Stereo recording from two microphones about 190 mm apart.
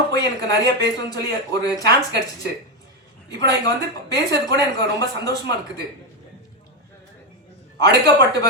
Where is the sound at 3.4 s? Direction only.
20° left (ahead or behind).